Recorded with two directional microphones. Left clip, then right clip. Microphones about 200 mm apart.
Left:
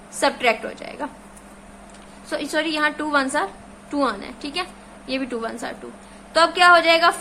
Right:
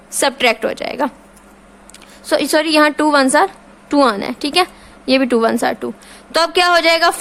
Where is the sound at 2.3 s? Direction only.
55° right (ahead or behind).